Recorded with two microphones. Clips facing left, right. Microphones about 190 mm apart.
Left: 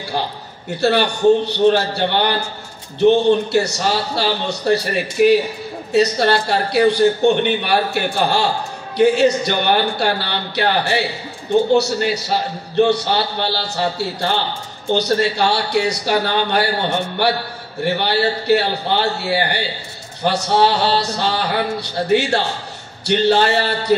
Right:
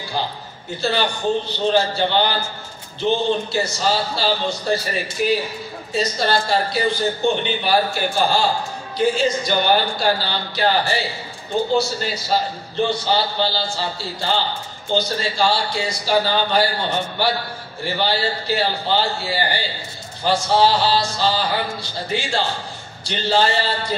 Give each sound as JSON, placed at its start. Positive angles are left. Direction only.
{"t": 0.7, "sound": "a man's voice", "side_deg": 65}
{"t": 17.8, "sound": "a man's voice", "side_deg": 65}